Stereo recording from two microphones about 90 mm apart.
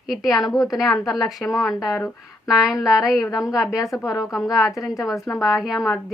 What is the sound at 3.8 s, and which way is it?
Speech, 40° left (ahead or behind).